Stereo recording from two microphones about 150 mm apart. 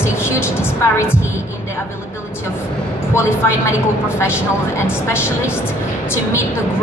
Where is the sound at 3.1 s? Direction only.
20° left (ahead or behind).